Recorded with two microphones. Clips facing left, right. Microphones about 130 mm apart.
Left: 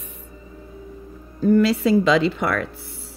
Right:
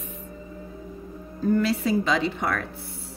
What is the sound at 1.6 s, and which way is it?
Speech, 90° left.